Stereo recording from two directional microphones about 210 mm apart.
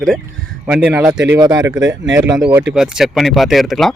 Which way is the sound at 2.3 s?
5° right (ahead or behind).